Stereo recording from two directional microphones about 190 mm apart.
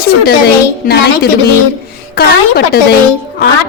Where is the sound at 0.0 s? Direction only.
55° left (ahead or behind).